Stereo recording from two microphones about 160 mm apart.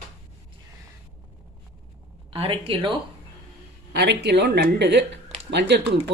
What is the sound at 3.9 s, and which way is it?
Speech, 90° right.